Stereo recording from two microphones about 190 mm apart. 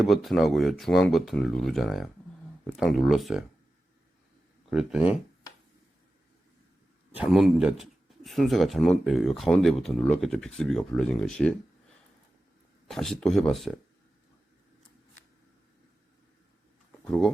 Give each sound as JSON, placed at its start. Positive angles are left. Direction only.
{"t": 0.0, "sound": "speech", "side_deg": 0}
{"t": 4.7, "sound": "speech", "side_deg": -5}
{"t": 7.2, "sound": "speech", "side_deg": 0}
{"t": 12.9, "sound": "speech", "side_deg": 0}
{"t": 17.1, "sound": "speech", "side_deg": 0}